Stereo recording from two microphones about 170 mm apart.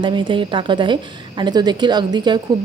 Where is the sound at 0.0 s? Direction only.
30° right (ahead or behind).